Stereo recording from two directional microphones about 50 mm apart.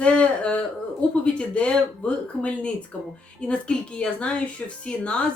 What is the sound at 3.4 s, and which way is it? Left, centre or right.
Speech, left.